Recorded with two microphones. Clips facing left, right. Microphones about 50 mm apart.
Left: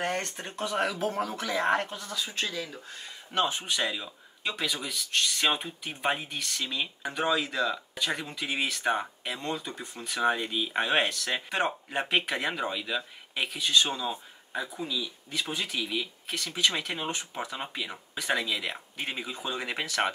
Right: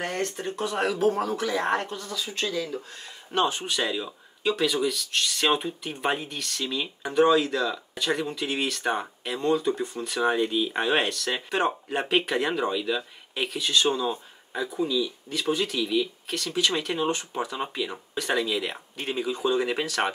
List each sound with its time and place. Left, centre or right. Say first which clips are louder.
0.6 s speech: right 3 dB; centre
2.4 s speech: right 6 dB; left
3.3 s speech: right 3 dB; centre